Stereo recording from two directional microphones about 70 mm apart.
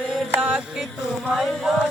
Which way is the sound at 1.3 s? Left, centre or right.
Centre.